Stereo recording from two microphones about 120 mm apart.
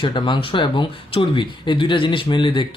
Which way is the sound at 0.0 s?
40° left (ahead or behind).